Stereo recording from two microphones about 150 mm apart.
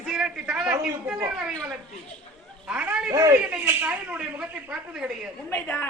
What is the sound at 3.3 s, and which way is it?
Speech, 5° right (ahead or behind).